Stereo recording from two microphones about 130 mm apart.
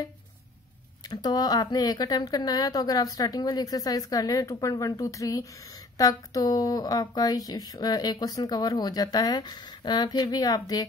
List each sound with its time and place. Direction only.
1.0 s speech: 30° left (ahead or behind)